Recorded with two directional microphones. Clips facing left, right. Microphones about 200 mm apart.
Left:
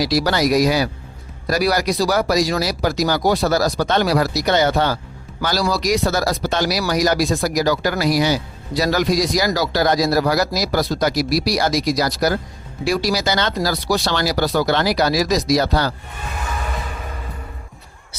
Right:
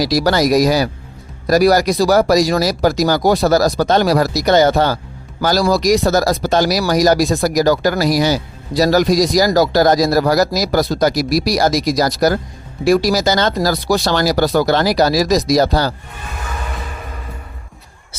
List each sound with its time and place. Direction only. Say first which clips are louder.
0.0 s speech: right 3 dB; 40° right (ahead or behind)